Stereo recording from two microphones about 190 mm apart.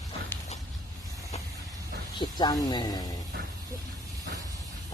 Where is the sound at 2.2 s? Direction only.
20° left (ahead or behind).